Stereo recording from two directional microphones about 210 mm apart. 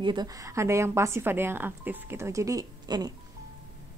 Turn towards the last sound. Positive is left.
turn(degrees=-20)  # may be behind; listen again after turning